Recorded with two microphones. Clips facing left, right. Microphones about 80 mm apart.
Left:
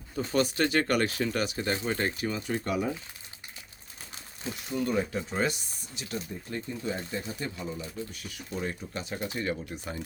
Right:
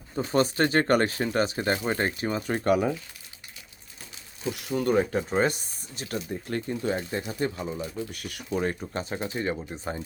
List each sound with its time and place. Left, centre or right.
0.3 s speech: right
2.6 s speech: right
4.5 s speech: right
6.5 s speech: right
7.3 s speech: right
8.1 s speech: right
8.4 s speech: right